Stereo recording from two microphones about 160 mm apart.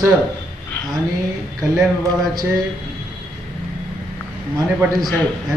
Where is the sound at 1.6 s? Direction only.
20° right (ahead or behind).